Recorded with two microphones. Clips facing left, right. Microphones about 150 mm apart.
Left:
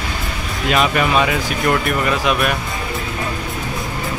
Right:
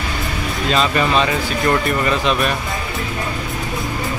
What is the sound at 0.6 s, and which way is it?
Speech, 10° left (ahead or behind).